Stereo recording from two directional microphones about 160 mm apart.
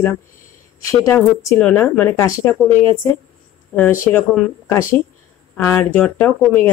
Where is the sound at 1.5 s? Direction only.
5° left (ahead or behind).